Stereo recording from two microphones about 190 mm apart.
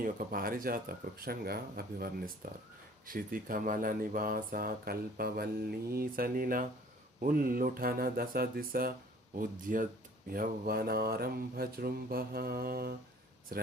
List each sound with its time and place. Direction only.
0.0 s speech: 50° right (ahead or behind)